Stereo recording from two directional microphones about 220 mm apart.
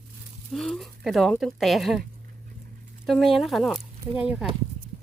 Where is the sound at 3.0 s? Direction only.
Centre (ahead or behind).